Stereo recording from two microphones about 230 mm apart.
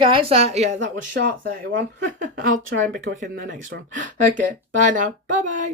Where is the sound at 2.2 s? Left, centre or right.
Right.